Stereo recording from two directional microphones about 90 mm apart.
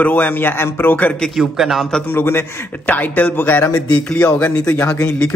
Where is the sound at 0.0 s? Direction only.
20° left (ahead or behind).